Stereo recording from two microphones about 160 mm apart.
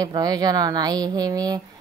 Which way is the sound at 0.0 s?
25° right (ahead or behind).